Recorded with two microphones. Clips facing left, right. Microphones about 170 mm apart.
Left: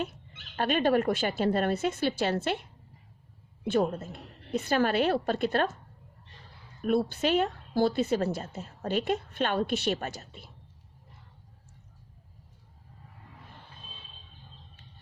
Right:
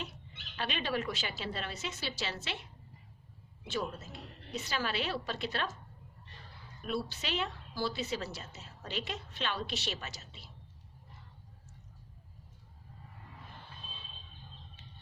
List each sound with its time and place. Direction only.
0.5 s a woman's voice: 50° left (ahead or behind)
6.8 s a woman's voice: 55° left (ahead or behind)